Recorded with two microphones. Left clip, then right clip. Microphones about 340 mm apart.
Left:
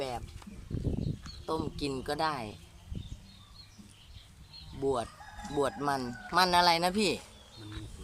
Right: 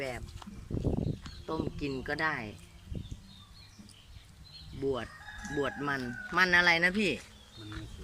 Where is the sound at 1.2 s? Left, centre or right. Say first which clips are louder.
Left 2 dB; centre.